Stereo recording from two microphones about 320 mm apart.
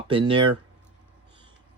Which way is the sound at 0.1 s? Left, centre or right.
Centre.